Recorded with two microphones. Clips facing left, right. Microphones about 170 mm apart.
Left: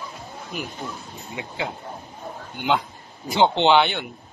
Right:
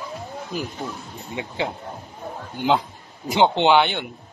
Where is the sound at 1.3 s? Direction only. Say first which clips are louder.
Right 3 dB; 30° right (ahead or behind).